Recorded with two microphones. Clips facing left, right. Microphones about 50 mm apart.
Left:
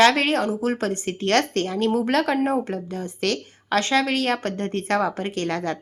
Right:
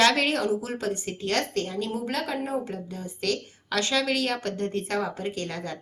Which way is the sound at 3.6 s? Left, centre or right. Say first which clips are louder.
Left 5 dB; left.